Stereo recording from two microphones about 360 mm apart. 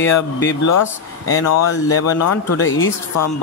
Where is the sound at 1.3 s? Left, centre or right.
Left.